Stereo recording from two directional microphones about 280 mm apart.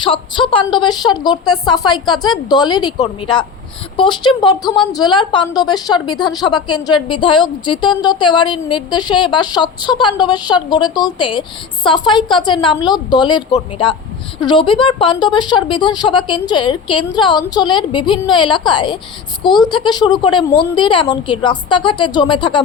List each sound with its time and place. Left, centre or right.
0.0 s a woman's voice: centre